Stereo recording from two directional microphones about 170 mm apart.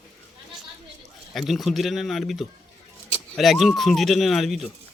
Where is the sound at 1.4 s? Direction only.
Centre (ahead or behind).